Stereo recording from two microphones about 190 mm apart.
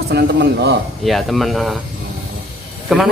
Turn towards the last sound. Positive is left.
turn(degrees=0)  # may be behind; listen again after turning